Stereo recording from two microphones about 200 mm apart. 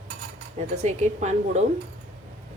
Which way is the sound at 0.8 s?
35° right (ahead or behind).